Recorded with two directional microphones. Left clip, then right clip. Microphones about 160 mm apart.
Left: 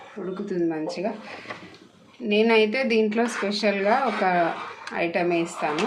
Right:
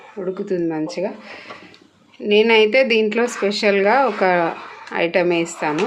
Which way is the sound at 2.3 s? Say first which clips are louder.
Right 7 dB; 55° right (ahead or behind).